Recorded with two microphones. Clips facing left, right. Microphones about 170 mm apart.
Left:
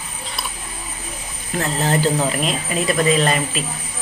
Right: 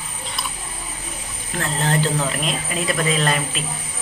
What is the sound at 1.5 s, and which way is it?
Speech, 5° left (ahead or behind).